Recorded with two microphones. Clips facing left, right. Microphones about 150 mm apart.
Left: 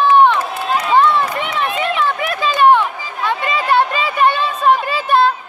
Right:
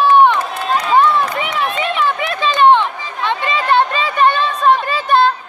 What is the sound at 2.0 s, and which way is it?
Run, 25° right (ahead or behind).